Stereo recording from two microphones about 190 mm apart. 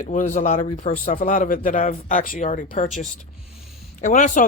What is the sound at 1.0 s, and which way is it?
Speech, 45° left (ahead or behind).